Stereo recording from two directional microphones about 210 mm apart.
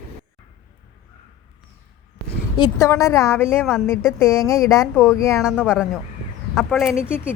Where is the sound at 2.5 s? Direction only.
20° left (ahead or behind).